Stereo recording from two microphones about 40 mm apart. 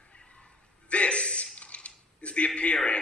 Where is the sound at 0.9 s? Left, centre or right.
Left.